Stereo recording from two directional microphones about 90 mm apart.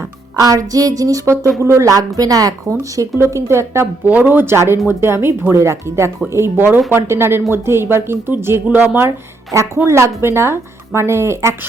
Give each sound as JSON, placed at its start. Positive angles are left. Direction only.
{"t": 0.3, "sound": "speech", "side_deg": -40}
{"t": 4.0, "sound": "speech", "side_deg": -20}
{"t": 9.5, "sound": "speech", "side_deg": -35}